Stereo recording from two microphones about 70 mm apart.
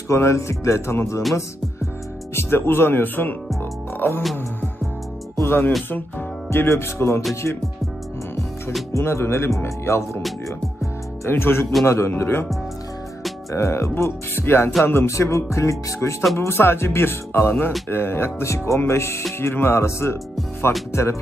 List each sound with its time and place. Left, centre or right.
0.1 s speech: left
2.3 s speech: left
5.4 s speech: left
8.9 s speech: left
11.2 s speech: left
13.5 s speech: left